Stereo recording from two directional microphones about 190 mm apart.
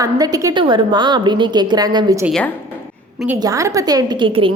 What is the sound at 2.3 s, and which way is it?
Speech, 5° left (ahead or behind).